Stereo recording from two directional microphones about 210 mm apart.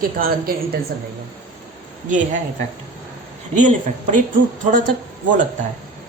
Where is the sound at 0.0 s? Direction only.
45° right (ahead or behind).